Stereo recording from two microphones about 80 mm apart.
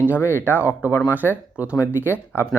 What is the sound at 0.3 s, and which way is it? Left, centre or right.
Speech, left.